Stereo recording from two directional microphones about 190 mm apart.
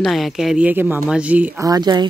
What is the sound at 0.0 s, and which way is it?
Speech, centre (ahead or behind).